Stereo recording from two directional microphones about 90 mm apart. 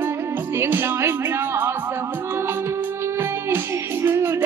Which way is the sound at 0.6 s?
25° right (ahead or behind).